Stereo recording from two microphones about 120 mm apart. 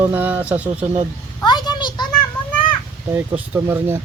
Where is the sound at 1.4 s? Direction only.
35° left (ahead or behind).